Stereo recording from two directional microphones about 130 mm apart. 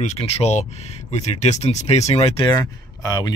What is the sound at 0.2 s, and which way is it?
Speech, 60° left (ahead or behind).